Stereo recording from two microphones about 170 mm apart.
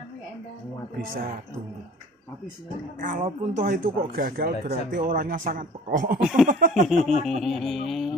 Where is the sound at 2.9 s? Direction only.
50° right (ahead or behind).